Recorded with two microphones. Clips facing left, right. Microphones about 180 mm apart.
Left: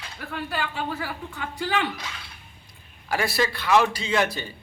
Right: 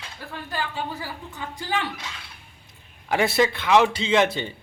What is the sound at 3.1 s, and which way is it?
A man's voice, 20° right (ahead or behind).